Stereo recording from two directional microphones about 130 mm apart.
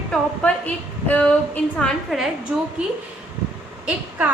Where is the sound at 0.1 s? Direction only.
10° left (ahead or behind).